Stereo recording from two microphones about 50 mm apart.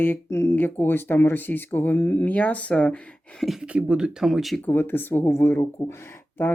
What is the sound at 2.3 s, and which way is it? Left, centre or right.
Speech, left.